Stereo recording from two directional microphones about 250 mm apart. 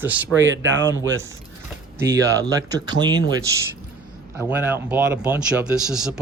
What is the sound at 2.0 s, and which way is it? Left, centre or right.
Speech, centre.